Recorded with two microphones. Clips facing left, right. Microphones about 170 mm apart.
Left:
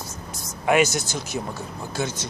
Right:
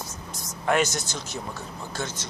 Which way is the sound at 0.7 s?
10° left (ahead or behind).